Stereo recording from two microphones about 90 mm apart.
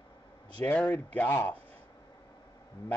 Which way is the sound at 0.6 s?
20° left (ahead or behind).